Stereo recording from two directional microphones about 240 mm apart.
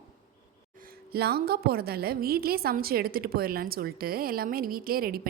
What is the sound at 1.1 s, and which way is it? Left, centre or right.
A woman's voice, right.